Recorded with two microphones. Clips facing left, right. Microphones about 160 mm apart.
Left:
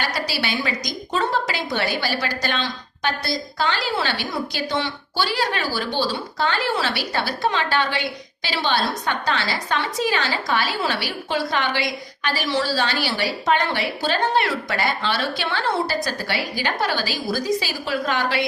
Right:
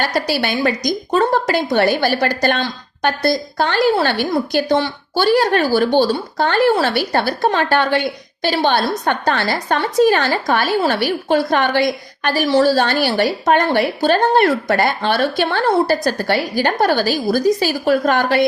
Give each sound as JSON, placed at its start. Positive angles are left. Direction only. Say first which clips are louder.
{"t": 0.0, "sound": "a woman's voice", "louder": "right 7 dB", "side_deg": -50}